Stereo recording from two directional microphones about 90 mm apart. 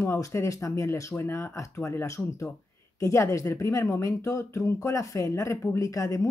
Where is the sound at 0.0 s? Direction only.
30° left (ahead or behind).